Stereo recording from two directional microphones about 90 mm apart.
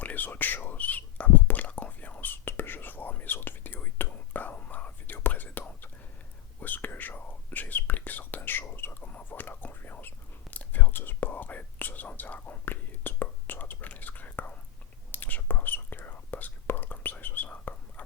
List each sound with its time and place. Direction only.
0.0 s whispering: 20° left (ahead or behind)